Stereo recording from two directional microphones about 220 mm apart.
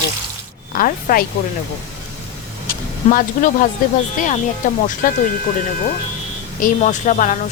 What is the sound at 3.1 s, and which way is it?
Speech, 35° left (ahead or behind).